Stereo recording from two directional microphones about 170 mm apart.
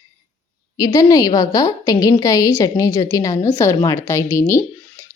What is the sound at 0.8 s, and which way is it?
A woman's voice, 20° left (ahead or behind).